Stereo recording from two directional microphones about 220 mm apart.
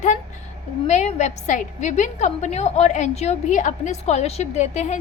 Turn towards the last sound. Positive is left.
turn(degrees=30)  # may be behind; listen again after turning